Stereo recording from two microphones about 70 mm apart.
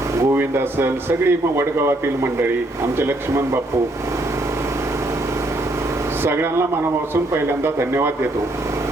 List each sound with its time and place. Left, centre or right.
0.3 s a man's voice: right
3.0 s a man's voice: right
6.2 s a man's voice: right